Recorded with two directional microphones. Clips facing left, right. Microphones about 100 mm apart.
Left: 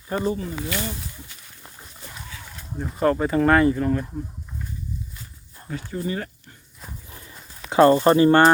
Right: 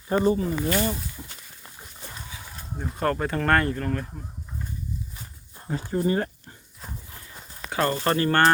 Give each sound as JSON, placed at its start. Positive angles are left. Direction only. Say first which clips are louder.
{"t": 0.1, "sound": "speech", "louder": "right 3 dB", "side_deg": -30}
{"t": 0.7, "sound": "speech", "louder": "right 5 dB", "side_deg": -40}
{"t": 2.7, "sound": "speech", "louder": "left 5 dB", "side_deg": 0}
{"t": 5.6, "sound": "speech", "louder": "right 4 dB", "side_deg": -35}
{"t": 7.7, "sound": "speech", "louder": "left 9 dB", "side_deg": 25}